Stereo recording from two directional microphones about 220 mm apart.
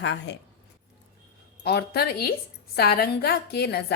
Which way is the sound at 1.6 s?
45° left (ahead or behind).